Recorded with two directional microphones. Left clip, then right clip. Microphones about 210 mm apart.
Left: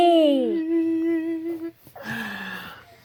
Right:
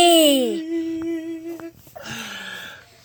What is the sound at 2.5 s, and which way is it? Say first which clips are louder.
Cough: right 1 dB; 15° left (ahead or behind).